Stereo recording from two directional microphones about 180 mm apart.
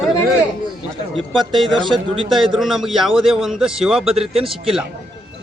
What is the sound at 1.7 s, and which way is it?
Speech, 25° right (ahead or behind).